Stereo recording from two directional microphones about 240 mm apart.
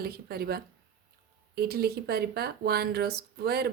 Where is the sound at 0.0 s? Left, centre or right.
Right.